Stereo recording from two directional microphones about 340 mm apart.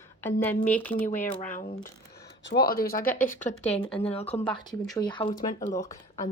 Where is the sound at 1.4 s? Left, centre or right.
Left.